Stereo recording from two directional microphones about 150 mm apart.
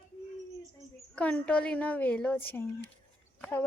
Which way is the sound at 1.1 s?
10° left (ahead or behind).